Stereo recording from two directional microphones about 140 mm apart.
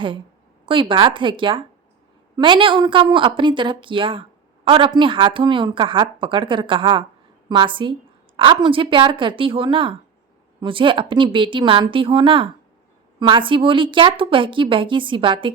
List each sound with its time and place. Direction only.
0.6 s a woman's voice: 35° right (ahead or behind)